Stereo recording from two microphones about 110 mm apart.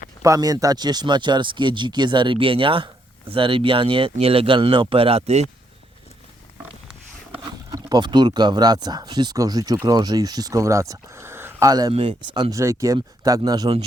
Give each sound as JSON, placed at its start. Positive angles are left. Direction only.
{"t": 0.2, "sound": "speech", "side_deg": -35}
{"t": 7.7, "sound": "speech", "side_deg": -35}
{"t": 11.7, "sound": "speech", "side_deg": -35}
{"t": 11.9, "sound": "speech", "side_deg": -50}
{"t": 12.5, "sound": "speech", "side_deg": -25}